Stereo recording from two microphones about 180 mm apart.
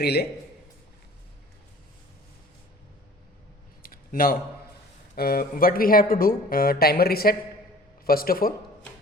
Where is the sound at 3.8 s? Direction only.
55° left (ahead or behind).